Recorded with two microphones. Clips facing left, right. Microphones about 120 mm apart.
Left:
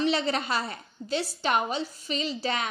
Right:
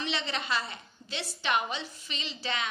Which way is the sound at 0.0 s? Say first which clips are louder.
Left 8 dB; 40° left (ahead or behind).